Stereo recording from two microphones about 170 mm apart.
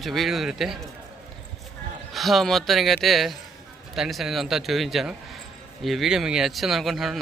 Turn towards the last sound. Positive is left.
turn(degrees=0)  # may be behind; listen again after turning